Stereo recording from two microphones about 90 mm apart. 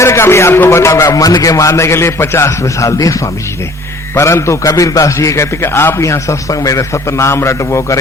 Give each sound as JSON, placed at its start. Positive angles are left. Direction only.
{"t": 0.0, "sound": "a man's voice", "side_deg": 30}